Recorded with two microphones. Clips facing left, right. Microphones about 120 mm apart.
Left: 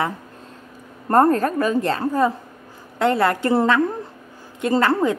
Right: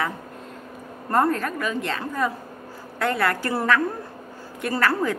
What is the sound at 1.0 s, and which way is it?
A woman's voice, 40° left (ahead or behind).